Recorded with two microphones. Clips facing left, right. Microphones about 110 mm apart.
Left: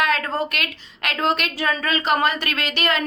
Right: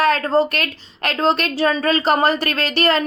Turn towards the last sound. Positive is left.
turn(degrees=-35)  # may be behind; listen again after turning